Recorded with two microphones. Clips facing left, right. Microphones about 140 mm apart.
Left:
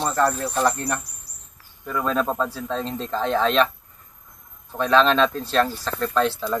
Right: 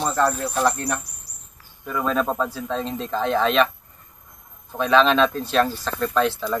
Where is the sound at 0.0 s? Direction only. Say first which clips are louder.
Even; 5° right (ahead or behind).